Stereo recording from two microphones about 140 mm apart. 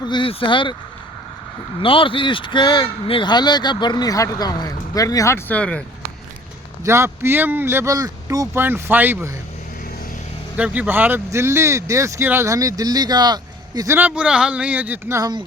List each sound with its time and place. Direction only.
0.0 s speech: 35° left (ahead or behind)
1.8 s speech: 40° left (ahead or behind); by 5.8 s 10° left (ahead or behind)
6.8 s speech: 20° right (ahead or behind)
10.6 s speech: 10° right (ahead or behind); by 13.9 s 30° right (ahead or behind)
13.9 s speech: 10° right (ahead or behind)
15.2 s speech: 30° right (ahead or behind)